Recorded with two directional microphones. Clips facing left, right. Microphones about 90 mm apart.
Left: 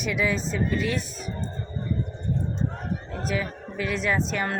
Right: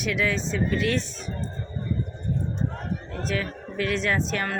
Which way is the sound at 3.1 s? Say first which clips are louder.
Even; 10° left (ahead or behind).